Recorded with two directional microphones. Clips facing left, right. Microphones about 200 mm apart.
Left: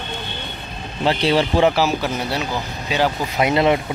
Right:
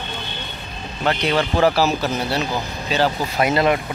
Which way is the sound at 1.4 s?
20° left (ahead or behind).